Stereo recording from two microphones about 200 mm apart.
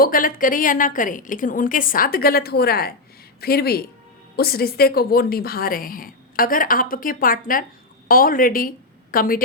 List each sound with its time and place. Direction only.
0.0 s a woman's voice: 45° left (ahead or behind)